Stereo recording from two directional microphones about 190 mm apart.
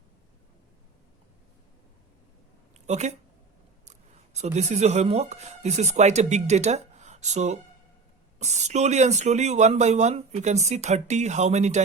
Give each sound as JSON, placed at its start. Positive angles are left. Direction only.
{"t": 2.7, "sound": "a woman's voice", "side_deg": -35}
{"t": 4.4, "sound": "speech", "side_deg": -35}